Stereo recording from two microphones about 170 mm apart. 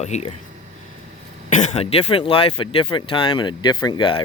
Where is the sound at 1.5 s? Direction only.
40° left (ahead or behind).